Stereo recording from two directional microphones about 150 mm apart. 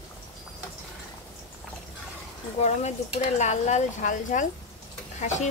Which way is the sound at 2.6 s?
50° left (ahead or behind).